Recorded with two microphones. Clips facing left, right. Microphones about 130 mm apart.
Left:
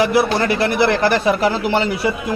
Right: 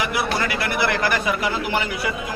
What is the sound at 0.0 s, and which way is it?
A man's voice, 30° left (ahead or behind).